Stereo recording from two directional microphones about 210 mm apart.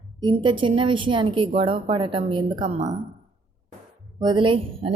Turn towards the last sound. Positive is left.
turn(degrees=-25)  # may be behind; listen again after turning